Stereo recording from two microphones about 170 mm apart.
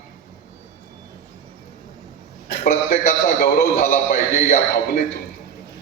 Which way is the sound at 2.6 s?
60° left (ahead or behind).